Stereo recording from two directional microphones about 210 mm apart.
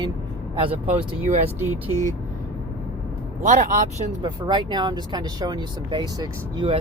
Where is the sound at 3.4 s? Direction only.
35° right (ahead or behind).